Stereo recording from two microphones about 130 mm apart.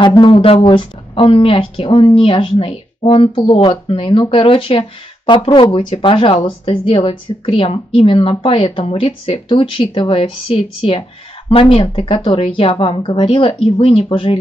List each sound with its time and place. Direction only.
0.0 s speech: 40° left (ahead or behind)